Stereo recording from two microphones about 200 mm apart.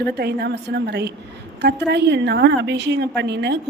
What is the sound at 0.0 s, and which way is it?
A woman's voice, 55° right (ahead or behind).